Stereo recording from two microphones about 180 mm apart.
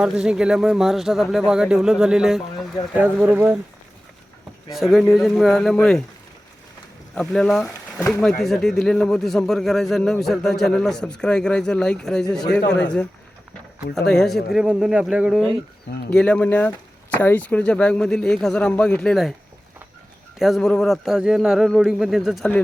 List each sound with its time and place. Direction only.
0.0 s a man's voice: 5° right (ahead or behind)
4.7 s a man's voice: centre (ahead or behind)
7.2 s a man's voice: centre (ahead or behind)
12.6 s a man's voice: 75° left (ahead or behind)
14.1 s a man's voice: centre (ahead or behind)
16.1 s speech: 5° left (ahead or behind)
20.4 s a man's voice: centre (ahead or behind)